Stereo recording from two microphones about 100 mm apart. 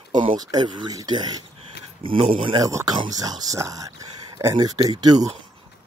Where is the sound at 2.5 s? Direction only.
40° right (ahead or behind).